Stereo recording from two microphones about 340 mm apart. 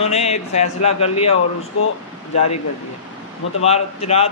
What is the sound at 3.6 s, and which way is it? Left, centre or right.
Speech, centre.